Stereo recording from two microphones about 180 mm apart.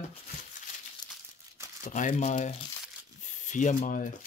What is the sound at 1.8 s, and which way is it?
Speech, 45° left (ahead or behind).